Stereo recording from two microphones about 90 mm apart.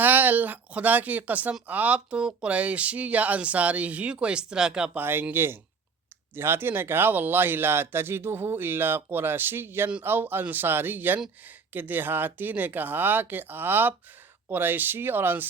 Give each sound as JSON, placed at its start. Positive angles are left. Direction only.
{"t": 0.0, "sound": "speech", "side_deg": -20}
{"t": 4.9, "sound": "speech", "side_deg": -25}